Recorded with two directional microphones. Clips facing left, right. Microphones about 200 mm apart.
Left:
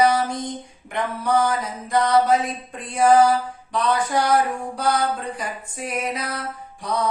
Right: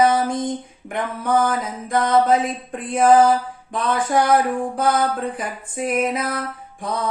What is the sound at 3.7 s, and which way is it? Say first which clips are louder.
Speech: right 1 dB; 50° right (ahead or behind).